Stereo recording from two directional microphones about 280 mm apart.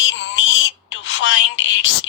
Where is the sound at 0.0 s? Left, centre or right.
Left.